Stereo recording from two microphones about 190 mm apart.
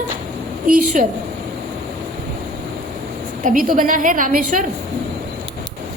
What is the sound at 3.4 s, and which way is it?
A woman's voice, 45° right (ahead or behind).